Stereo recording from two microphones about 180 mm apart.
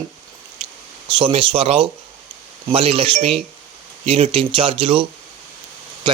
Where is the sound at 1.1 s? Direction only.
30° right (ahead or behind).